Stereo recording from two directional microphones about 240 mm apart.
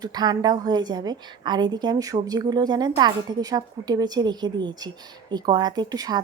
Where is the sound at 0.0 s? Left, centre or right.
Centre.